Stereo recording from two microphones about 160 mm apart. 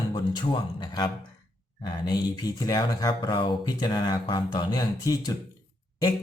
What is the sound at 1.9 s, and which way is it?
Speech, 25° left (ahead or behind).